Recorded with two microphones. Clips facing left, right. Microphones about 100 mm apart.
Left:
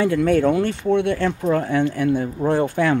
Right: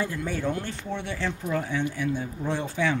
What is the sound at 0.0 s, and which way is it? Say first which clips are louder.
Speech: left 12 dB; 75° left (ahead or behind).